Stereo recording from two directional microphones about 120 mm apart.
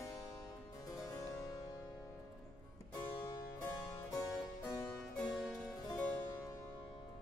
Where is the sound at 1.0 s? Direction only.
30° left (ahead or behind).